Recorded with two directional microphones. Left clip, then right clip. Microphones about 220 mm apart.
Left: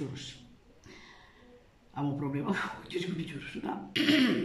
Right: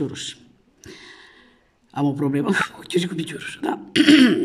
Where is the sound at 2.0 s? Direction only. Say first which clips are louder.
Right 12 dB; 50° right (ahead or behind).